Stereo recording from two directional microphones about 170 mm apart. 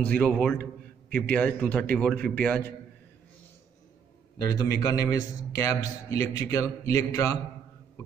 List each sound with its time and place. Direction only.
0.0 s a man's voice: 5° left (ahead or behind)
4.5 s a man's voice: 20° left (ahead or behind)